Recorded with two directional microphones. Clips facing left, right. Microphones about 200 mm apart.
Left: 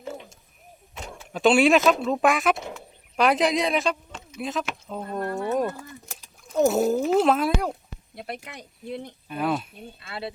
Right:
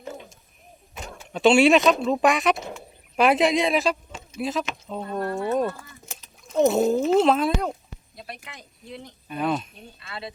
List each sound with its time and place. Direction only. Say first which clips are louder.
0.9 s speech: right 1 dB; 5° right (ahead or behind)
8.1 s speech: left 5 dB; 55° left (ahead or behind)
9.3 s speech: right 1 dB; 5° left (ahead or behind)